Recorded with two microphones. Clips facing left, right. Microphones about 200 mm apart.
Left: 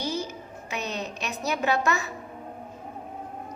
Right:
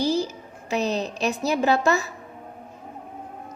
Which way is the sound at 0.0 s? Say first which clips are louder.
Right 7 dB; 35° right (ahead or behind).